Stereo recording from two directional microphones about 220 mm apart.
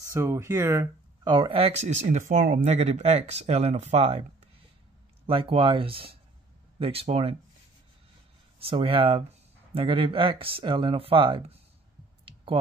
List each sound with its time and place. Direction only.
0.0 s speech: 10° right (ahead or behind); by 4.2 s 30° right (ahead or behind)
5.2 s speech: 25° right (ahead or behind)
8.5 s speech: 25° right (ahead or behind)